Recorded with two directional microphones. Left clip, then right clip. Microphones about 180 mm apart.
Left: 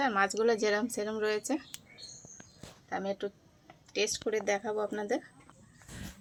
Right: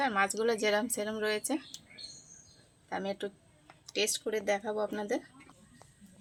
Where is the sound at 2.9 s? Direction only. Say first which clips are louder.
Left 1 dB; 10° left (ahead or behind).